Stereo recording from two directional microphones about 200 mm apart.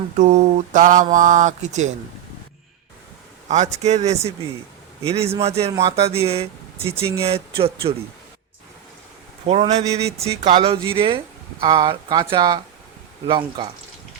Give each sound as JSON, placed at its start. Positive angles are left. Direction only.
{"t": 0.2, "sound": "speech", "side_deg": -40}
{"t": 3.5, "sound": "speech", "side_deg": -35}
{"t": 9.5, "sound": "speech", "side_deg": -35}